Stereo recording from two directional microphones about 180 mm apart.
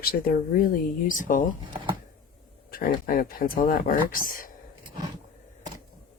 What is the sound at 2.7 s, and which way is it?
Speech, 50° left (ahead or behind).